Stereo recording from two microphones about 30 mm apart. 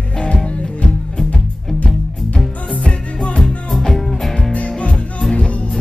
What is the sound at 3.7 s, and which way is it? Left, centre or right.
Music, centre.